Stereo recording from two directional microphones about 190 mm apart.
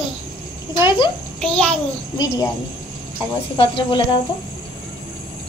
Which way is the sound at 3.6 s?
25° left (ahead or behind).